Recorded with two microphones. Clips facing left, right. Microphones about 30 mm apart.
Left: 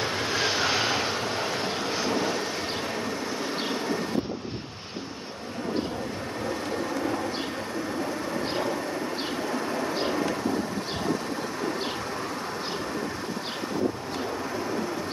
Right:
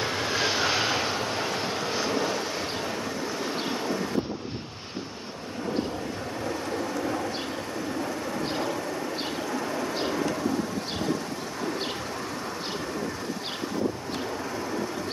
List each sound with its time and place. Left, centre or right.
0.0 s vehicle: centre
9.5 s vehicle: centre